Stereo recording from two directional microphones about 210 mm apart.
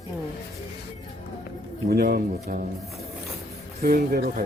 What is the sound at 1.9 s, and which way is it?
Speech, 45° right (ahead or behind).